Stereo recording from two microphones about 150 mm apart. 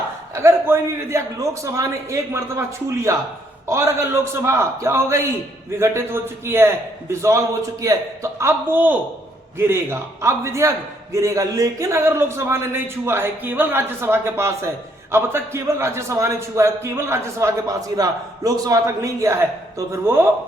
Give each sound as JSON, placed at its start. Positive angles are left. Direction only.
{"t": 0.3, "sound": "a man's voice", "side_deg": -15}